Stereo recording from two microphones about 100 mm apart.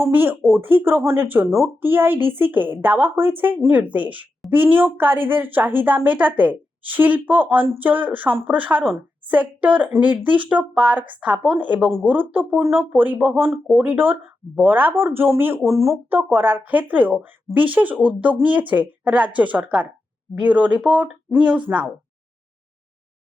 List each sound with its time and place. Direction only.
0.0 s a woman's voice: 20° right (ahead or behind)